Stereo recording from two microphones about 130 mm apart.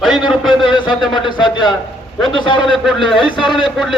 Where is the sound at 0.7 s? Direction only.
35° left (ahead or behind).